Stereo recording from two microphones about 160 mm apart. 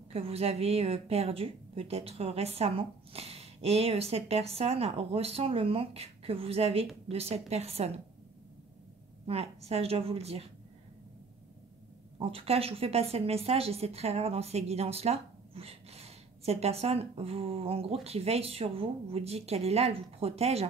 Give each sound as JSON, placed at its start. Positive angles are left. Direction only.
{"t": 0.1, "sound": "a woman's voice", "side_deg": -40}
{"t": 9.2, "sound": "a woman's voice", "side_deg": -40}
{"t": 12.2, "sound": "a woman's voice", "side_deg": -35}